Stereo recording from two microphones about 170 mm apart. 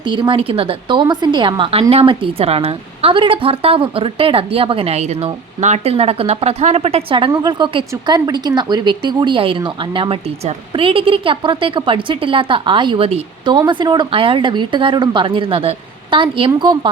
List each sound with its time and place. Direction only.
0.1 s a woman's voice: 30° right (ahead or behind)